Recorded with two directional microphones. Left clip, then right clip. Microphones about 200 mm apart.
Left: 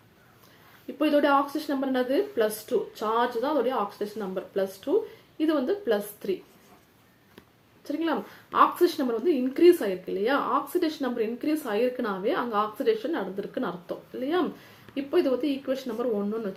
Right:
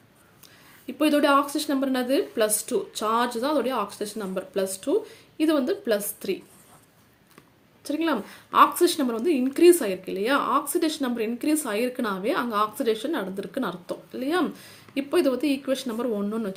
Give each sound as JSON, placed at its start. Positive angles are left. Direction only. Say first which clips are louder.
{"t": 0.9, "sound": "a woman's voice", "louder": "right 2 dB", "side_deg": -40}
{"t": 7.9, "sound": "a woman's voice", "louder": "right 3 dB", "side_deg": -40}